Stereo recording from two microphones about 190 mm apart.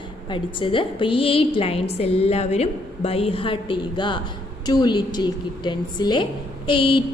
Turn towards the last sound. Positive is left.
turn(degrees=25)  # may be behind; listen again after turning